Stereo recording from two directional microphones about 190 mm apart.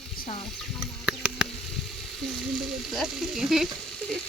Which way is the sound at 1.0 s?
5° right (ahead or behind).